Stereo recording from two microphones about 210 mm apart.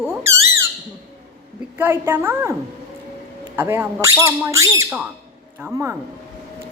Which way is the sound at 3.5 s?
10° right (ahead or behind).